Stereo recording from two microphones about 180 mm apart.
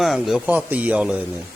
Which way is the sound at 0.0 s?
Centre (ahead or behind).